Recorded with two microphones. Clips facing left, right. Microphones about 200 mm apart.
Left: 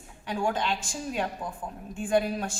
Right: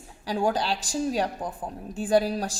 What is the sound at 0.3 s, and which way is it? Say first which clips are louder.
A woman's voice: right 3 dB; 35° right (ahead or behind).